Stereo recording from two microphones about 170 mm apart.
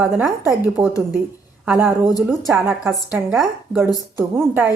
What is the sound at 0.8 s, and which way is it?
A woman's voice, 10° right (ahead or behind).